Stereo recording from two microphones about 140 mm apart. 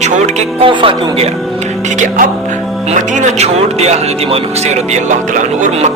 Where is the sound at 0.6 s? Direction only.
40° right (ahead or behind).